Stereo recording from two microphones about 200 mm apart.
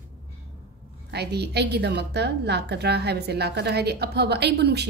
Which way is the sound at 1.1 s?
55° right (ahead or behind).